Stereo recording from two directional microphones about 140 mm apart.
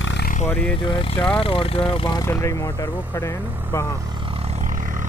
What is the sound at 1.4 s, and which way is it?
Speech, 40° left (ahead or behind).